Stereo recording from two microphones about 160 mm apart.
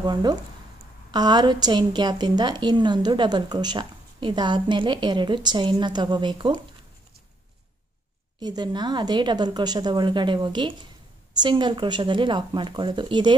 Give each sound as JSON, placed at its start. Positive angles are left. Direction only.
{"t": 0.0, "sound": "a woman's voice", "side_deg": -25}
{"t": 8.4, "sound": "a woman's voice", "side_deg": -25}